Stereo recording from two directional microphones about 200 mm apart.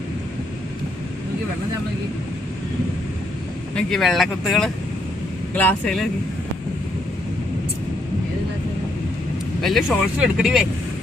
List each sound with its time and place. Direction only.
3.8 s speech: 5° left (ahead or behind)
9.6 s speech: centre (ahead or behind)